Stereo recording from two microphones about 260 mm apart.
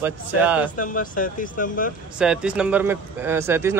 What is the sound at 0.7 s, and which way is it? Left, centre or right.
Speech, left.